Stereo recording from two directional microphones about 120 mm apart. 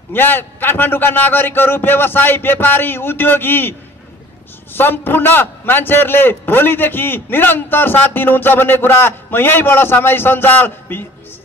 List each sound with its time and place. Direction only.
0.1 s a man's voice: 15° left (ahead or behind)
4.7 s a man's voice: 15° left (ahead or behind)